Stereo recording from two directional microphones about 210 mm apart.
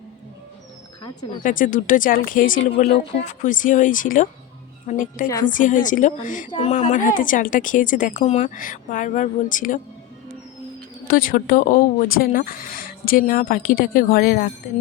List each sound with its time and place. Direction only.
1.4 s a woman's voice: 40° left (ahead or behind)
11.1 s a woman's voice: 45° left (ahead or behind)